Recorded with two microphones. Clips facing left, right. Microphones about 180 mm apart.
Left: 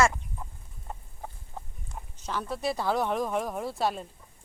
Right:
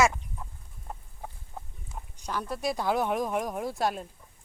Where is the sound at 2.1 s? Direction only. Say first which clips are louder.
Even; 10° right (ahead or behind).